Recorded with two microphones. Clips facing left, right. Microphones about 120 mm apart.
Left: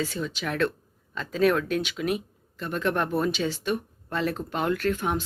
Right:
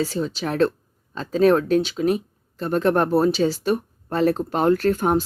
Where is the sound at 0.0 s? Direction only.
35° right (ahead or behind).